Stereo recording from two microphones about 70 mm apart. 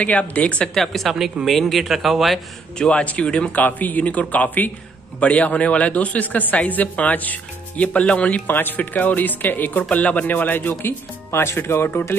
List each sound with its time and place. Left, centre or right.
0.0 s a woman's voice: centre
0.7 s speech: centre
2.8 s a woman's voice: centre; by 12.2 s left